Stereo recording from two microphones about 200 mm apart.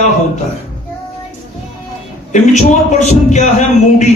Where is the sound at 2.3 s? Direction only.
35° left (ahead or behind).